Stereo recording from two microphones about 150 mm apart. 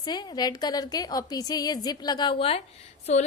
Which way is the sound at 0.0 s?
30° left (ahead or behind).